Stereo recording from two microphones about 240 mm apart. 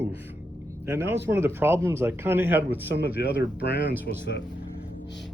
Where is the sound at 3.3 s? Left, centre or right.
Left.